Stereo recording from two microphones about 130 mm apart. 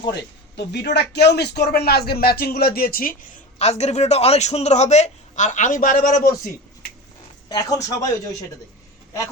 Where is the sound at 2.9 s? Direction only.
90° left.